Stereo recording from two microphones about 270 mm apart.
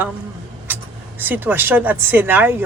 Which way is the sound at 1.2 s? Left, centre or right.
Centre.